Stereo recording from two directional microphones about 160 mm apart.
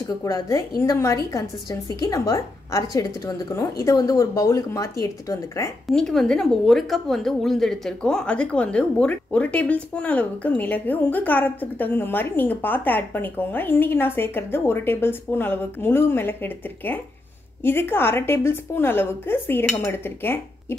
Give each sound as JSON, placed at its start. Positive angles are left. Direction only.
{"t": 0.1, "sound": "a woman's voice", "side_deg": 20}
{"t": 5.9, "sound": "a woman's voice", "side_deg": 0}